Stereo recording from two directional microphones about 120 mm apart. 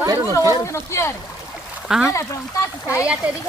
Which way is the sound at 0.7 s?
25° left (ahead or behind).